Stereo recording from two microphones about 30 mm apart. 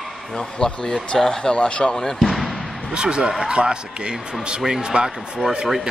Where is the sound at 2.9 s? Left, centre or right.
Right.